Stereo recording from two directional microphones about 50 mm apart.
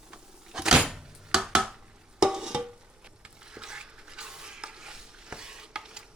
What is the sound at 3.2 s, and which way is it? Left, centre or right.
Stir, centre.